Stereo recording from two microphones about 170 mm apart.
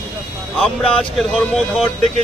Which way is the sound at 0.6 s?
5° left (ahead or behind).